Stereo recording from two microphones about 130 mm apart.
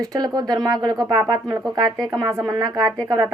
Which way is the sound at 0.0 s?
30° right (ahead or behind).